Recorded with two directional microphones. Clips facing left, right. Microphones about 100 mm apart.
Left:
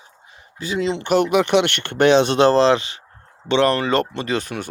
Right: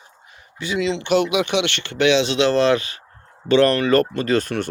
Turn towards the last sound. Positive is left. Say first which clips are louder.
# right 4 dB
turn(degrees=15)  # may be behind; listen again after turning